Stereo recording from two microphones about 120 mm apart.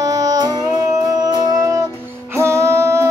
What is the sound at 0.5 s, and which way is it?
Music, 25° left (ahead or behind).